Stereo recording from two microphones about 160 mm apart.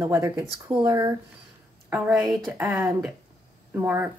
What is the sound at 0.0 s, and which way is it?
Speech, 15° right (ahead or behind).